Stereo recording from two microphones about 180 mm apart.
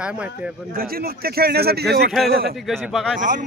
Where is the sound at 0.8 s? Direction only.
55° right (ahead or behind).